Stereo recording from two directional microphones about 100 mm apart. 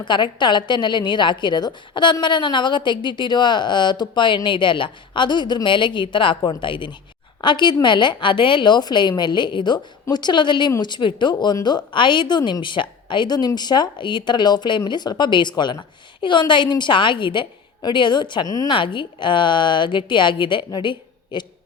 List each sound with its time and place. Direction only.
0.0 s speech: 50° left (ahead or behind)
18.4 s speech: 40° left (ahead or behind)
18.7 s speech: 55° left (ahead or behind)